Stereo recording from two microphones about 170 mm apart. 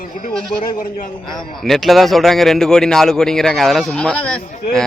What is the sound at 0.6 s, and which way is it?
Speech, 55° left (ahead or behind).